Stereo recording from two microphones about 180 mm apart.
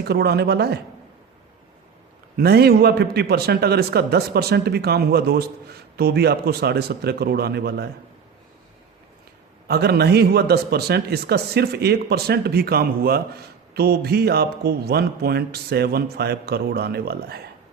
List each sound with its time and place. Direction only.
0.0 s a man's voice: 65° right (ahead or behind)
2.3 s a man's voice: 60° right (ahead or behind)
9.6 s a man's voice: 60° right (ahead or behind)